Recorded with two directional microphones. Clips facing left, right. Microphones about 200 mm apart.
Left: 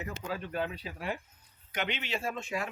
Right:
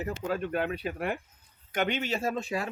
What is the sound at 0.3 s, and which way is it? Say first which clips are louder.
Speech: right 5 dB; 55° right (ahead or behind).